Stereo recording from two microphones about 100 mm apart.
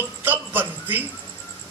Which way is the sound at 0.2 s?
20° right (ahead or behind).